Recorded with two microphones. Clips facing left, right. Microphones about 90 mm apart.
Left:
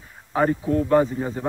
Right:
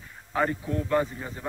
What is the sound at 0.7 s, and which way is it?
Speech, 40° left (ahead or behind).